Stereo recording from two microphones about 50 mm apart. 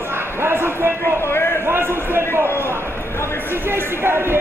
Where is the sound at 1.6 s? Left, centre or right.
Right.